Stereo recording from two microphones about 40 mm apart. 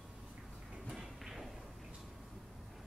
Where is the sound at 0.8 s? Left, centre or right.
Centre.